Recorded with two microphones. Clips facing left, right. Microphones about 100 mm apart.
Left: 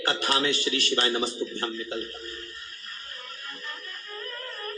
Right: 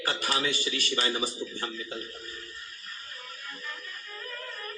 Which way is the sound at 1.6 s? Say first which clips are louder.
Left 5 dB; 60° left (ahead or behind).